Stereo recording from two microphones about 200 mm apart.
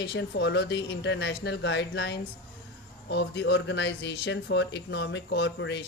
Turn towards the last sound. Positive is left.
turn(degrees=60)  # may be behind; listen again after turning